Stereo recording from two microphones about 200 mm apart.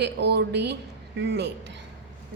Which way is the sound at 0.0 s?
55° right (ahead or behind).